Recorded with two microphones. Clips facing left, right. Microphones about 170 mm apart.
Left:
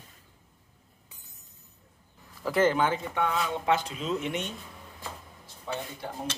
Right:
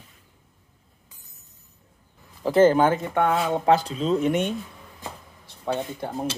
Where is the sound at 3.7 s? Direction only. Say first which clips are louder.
Right 8 dB; 35° right (ahead or behind).